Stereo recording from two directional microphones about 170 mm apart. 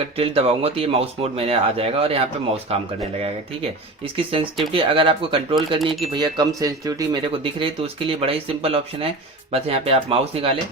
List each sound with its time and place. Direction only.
0.2 s speech: 35° right (ahead or behind)
4.7 s speech: 30° right (ahead or behind)
5.8 s speech: centre (ahead or behind)
6.1 s speech: 25° right (ahead or behind)